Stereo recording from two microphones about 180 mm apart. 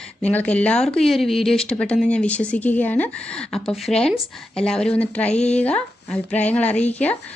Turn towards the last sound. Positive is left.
turn(degrees=10)  # may be behind; listen again after turning